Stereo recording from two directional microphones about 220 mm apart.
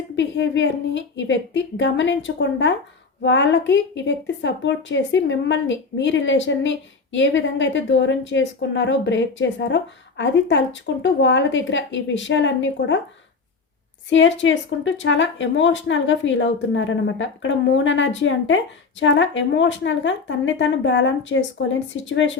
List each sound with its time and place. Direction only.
0.2 s a woman's voice: 55° left (ahead or behind)
14.1 s a woman's voice: 55° left (ahead or behind)